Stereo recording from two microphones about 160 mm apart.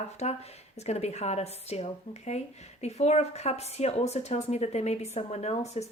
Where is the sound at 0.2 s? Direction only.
40° left (ahead or behind).